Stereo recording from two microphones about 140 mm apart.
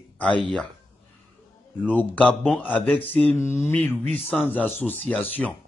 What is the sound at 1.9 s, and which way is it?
Speech, 10° left (ahead or behind).